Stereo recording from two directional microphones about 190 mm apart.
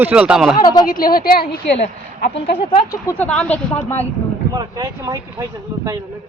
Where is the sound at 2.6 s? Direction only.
25° left (ahead or behind).